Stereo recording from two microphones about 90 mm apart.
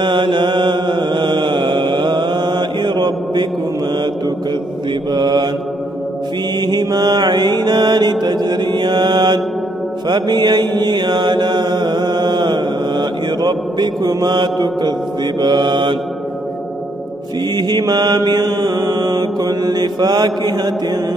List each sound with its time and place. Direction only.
0.0 s mantra: 60° right (ahead or behind)
5.1 s mantra: 50° right (ahead or behind)
6.6 s mantra: 50° right (ahead or behind)
17.6 s mantra: 50° right (ahead or behind)